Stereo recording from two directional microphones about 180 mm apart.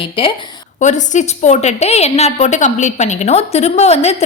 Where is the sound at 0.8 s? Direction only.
40° left (ahead or behind).